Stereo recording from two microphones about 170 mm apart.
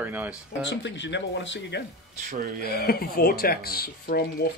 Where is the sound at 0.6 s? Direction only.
90° left.